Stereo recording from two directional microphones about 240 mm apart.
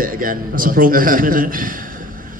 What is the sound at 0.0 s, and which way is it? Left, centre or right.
Speech, right.